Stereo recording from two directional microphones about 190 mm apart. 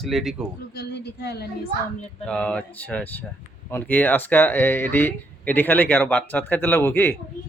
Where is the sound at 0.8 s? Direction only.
60° left (ahead or behind).